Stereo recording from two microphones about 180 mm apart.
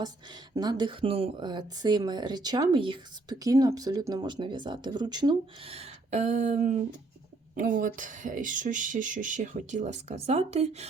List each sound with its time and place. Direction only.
0.0 s speech: 20° right (ahead or behind)